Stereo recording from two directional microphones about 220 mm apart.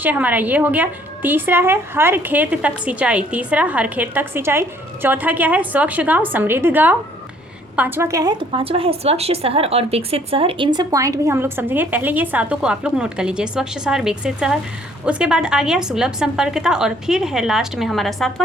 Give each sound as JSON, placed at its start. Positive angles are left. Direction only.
{"t": 0.0, "sound": "a woman's voice", "side_deg": -5}